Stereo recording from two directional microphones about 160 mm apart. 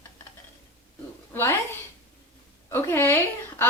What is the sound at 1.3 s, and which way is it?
Speech, 15° left (ahead or behind).